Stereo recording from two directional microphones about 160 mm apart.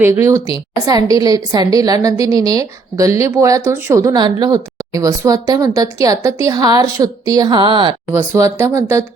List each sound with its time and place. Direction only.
0.0 s a woman's voice: 20° right (ahead or behind)
8.1 s speech: 15° right (ahead or behind)